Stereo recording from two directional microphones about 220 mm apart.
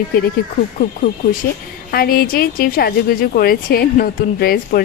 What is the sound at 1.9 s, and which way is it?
A woman's voice, 40° left (ahead or behind).